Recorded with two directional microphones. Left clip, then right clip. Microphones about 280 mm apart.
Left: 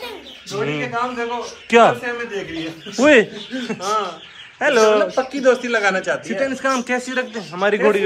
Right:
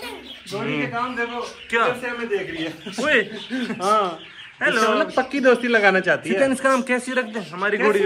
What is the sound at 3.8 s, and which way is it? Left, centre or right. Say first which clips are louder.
Speech: right 2 dB; right.